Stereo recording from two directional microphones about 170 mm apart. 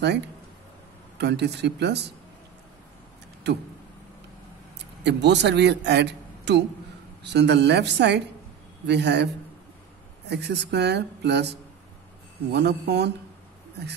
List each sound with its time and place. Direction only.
0.0 s speech: 85° right
3.4 s a man's voice: 90° right
5.0 s a man's voice: 90° right
10.3 s speech: 80° right